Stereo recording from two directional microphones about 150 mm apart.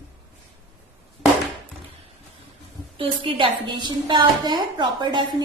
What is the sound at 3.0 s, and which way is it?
A woman's voice, 35° right (ahead or behind).